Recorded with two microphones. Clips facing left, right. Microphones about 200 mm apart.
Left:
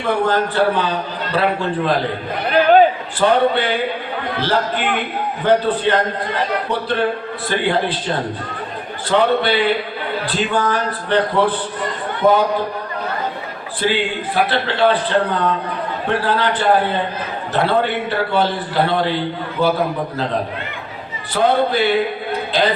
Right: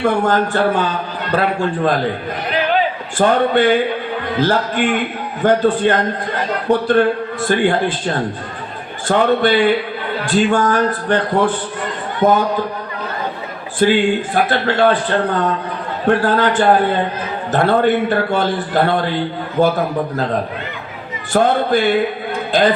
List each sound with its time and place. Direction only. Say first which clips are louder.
0.3 s a man's voice: right 1 dB; 45° right (ahead or behind)
3.2 s a man's voice: right 2 dB; 45° right (ahead or behind)
13.7 s a man's voice: right 6 dB; 45° right (ahead or behind)
21.3 s a man's voice: right 2 dB; 45° right (ahead or behind)